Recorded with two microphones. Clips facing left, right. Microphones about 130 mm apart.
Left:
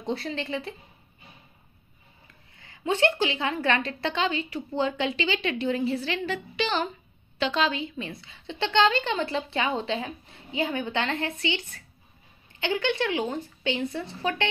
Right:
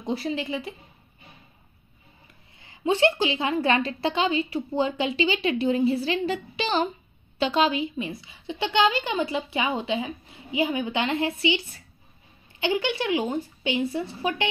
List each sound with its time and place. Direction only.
0.0 s a woman's voice: 5° right (ahead or behind)
2.6 s a woman's voice: 20° right (ahead or behind)